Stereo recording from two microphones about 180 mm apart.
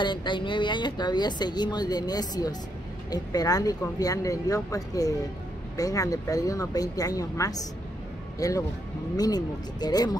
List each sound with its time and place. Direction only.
0.0 s speech: 25° left (ahead or behind)